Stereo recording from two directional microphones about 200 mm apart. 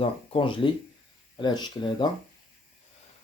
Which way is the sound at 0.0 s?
25° left (ahead or behind).